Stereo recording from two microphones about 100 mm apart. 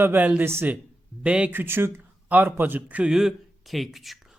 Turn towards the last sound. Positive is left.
turn(degrees=0)  # may be behind; listen again after turning